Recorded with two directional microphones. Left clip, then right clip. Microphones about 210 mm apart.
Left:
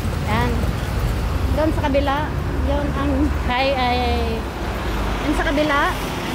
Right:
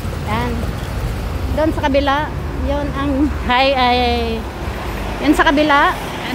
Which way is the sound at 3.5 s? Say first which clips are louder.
Right 6 dB; 50° right (ahead or behind).